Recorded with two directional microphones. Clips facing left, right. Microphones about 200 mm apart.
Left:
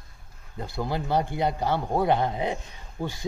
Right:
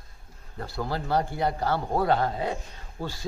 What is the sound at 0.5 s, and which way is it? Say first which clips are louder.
A man's voice: left 1 dB; 20° left (ahead or behind).